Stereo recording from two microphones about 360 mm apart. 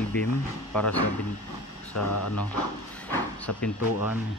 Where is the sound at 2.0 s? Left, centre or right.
Left.